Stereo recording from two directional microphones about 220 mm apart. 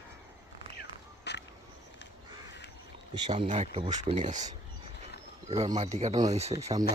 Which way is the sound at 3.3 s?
35° right (ahead or behind).